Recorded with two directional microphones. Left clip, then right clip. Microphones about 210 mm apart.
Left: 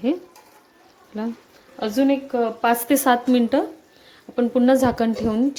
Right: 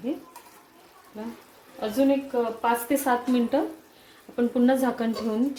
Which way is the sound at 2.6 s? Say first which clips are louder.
Left 7 dB; 45° left (ahead or behind).